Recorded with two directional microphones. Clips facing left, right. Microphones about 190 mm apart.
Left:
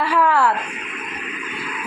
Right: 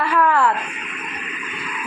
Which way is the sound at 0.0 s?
10° left (ahead or behind).